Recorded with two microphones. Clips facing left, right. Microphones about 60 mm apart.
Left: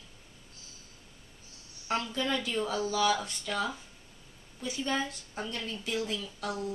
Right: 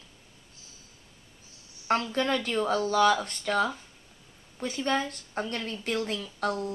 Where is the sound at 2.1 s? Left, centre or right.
Right.